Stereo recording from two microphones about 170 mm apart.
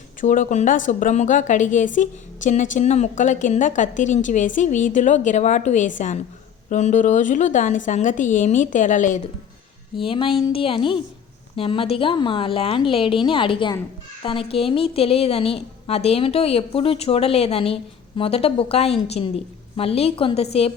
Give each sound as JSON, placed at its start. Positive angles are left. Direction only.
{"t": 0.2, "sound": "a woman's voice", "side_deg": 50}
{"t": 10.0, "sound": "a woman's voice", "side_deg": 30}